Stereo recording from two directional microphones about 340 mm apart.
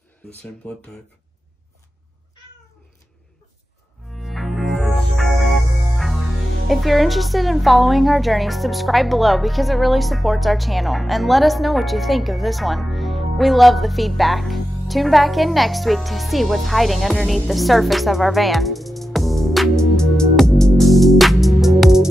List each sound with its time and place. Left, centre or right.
4.1 s music: centre